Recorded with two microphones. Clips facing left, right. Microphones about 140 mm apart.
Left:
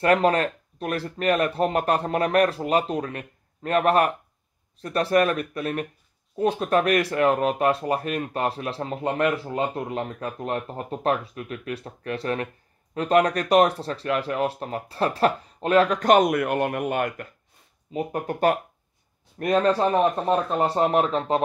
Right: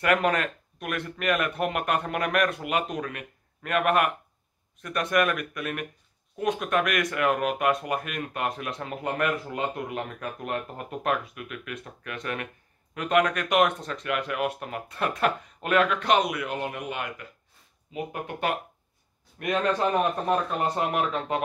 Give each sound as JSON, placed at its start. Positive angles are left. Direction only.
{"t": 0.0, "sound": "speech", "side_deg": 30}
{"t": 17.9, "sound": "speech", "side_deg": 40}